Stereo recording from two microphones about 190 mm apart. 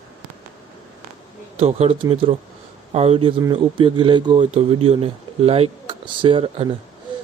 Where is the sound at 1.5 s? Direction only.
35° right (ahead or behind).